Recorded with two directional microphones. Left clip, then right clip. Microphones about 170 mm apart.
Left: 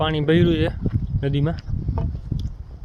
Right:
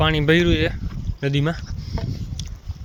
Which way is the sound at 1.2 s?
10° left (ahead or behind).